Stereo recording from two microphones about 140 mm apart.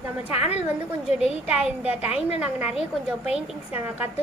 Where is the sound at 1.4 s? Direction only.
10° right (ahead or behind).